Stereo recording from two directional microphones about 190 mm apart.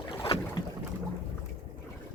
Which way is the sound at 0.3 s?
30° left (ahead or behind).